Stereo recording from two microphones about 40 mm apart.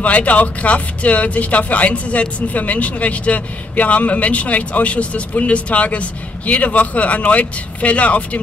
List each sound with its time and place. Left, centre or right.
0.0 s speech: left